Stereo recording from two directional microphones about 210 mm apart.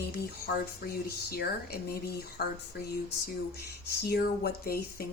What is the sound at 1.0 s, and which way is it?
Speech, 45° left (ahead or behind).